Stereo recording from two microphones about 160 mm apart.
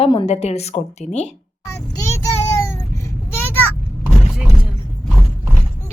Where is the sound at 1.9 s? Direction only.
20° left (ahead or behind).